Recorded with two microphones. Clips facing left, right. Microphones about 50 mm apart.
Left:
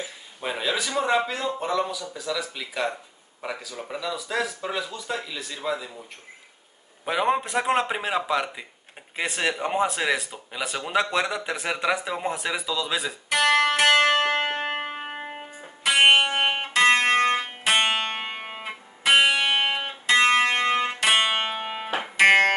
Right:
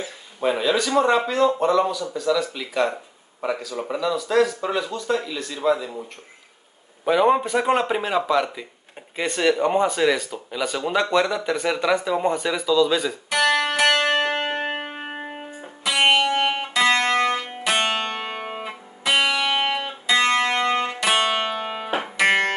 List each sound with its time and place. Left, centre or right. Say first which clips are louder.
0.0 s speech: right 8 dB; centre
7.1 s speech: right 6 dB; centre
13.3 s music: even; left
14.8 s music: even; centre
16.0 s music: even; left